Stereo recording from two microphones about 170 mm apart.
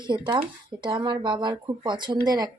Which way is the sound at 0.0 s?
25° right (ahead or behind).